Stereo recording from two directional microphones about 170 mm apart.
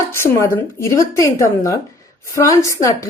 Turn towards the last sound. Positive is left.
turn(degrees=20)  # may be behind; listen again after turning